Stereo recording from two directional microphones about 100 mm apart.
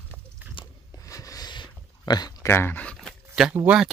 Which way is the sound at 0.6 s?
60° left (ahead or behind).